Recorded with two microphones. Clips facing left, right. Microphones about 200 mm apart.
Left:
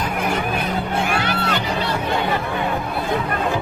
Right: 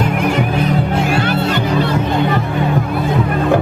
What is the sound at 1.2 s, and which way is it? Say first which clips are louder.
Music: right 6 dB; 50° right (ahead or behind).